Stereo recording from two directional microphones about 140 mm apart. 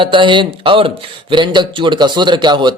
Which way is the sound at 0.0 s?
35° right (ahead or behind).